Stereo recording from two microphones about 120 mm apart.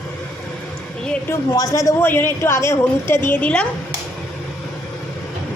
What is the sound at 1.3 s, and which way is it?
A woman's voice, 25° left (ahead or behind).